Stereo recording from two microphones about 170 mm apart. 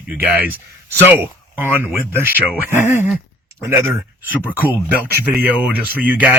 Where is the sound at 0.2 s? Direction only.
10° right (ahead or behind).